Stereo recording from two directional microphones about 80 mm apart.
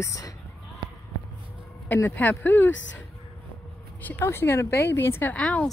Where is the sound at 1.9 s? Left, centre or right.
Left.